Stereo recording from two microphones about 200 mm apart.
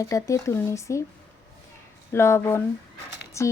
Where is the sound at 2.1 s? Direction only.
15° left (ahead or behind).